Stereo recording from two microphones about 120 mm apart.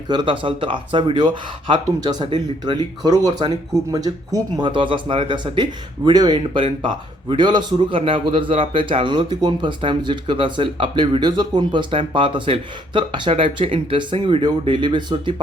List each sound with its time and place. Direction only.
0.1 s speech: 40° right (ahead or behind)
4.6 s a man's voice: 45° right (ahead or behind)